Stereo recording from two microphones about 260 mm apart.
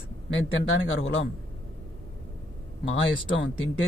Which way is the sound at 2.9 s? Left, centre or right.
Left.